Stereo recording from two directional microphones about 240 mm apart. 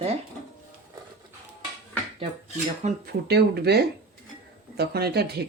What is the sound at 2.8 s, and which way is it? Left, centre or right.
Speech, right.